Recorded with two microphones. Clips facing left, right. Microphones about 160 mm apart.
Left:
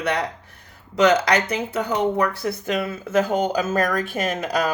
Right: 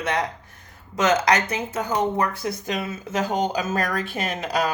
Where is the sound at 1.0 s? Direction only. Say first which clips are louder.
Left 2 dB; 65° left (ahead or behind).